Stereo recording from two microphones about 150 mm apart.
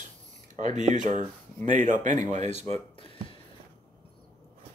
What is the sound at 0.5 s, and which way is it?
Speech, 55° right (ahead or behind).